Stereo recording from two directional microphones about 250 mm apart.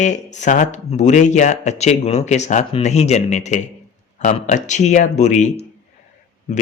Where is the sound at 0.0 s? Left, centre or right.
Left.